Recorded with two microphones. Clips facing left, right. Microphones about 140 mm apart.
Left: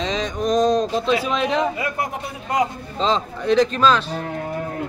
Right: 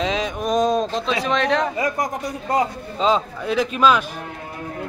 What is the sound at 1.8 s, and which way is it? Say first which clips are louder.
Speech: right 3 dB; 40° right (ahead or behind).